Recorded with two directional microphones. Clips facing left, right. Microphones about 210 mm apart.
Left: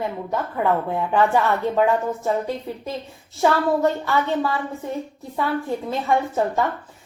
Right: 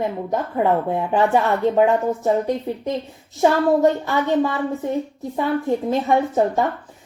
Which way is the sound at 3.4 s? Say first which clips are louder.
Right 3 dB; 20° right (ahead or behind).